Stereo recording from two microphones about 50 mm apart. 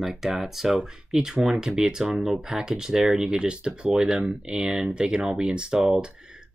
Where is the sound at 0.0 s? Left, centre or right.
Centre.